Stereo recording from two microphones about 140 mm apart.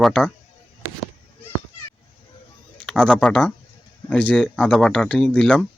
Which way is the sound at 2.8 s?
5° left (ahead or behind).